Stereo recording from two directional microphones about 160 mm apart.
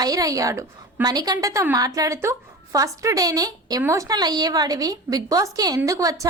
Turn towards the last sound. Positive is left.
turn(degrees=-20)  # may be behind; listen again after turning